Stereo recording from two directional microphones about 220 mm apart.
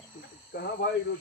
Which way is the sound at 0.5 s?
50° left (ahead or behind).